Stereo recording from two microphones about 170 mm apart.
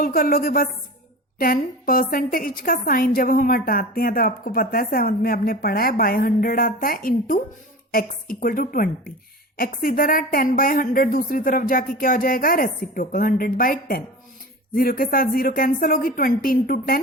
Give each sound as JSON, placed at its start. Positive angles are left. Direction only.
{"t": 0.0, "sound": "a woman's voice", "side_deg": 60}